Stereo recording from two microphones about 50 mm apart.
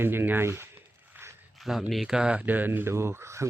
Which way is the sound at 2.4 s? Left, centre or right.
Right.